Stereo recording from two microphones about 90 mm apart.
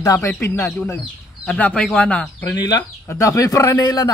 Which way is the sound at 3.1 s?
35° left (ahead or behind).